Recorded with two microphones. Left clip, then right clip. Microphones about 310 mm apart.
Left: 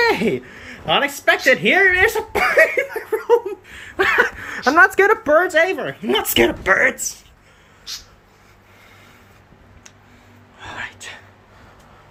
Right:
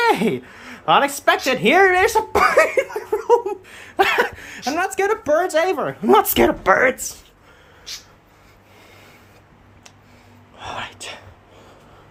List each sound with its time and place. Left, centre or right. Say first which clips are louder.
0.0 s speech: even; centre
10.6 s whispering: right 1 dB; right